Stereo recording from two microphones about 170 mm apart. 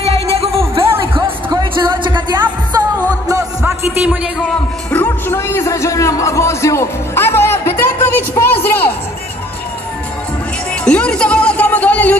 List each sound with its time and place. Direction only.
0.0 s music: 35° right (ahead or behind); by 4.6 s 5° right (ahead or behind)
4.9 s a man's voice: 10° left (ahead or behind)
10.7 s a sound: 5° left (ahead or behind)